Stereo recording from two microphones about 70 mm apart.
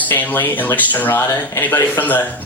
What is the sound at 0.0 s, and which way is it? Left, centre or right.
Speech, left.